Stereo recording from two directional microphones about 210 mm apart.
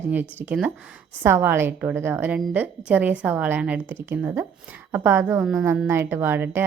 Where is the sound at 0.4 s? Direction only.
5° right (ahead or behind).